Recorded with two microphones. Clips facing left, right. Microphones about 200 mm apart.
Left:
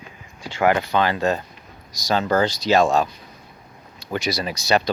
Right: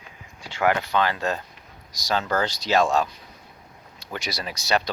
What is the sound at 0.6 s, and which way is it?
Speech, 10° left (ahead or behind).